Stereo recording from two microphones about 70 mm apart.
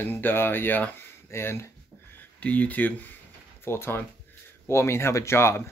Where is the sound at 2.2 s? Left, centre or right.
Left.